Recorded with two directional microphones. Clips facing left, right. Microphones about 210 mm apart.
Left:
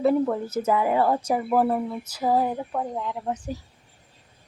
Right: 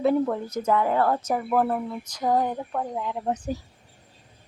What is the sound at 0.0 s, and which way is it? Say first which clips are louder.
A woman's voice: left 1 dB; centre (ahead or behind).